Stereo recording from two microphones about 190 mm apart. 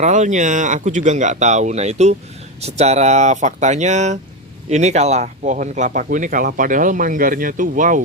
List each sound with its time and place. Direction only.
0.0 s speech: 40° right (ahead or behind)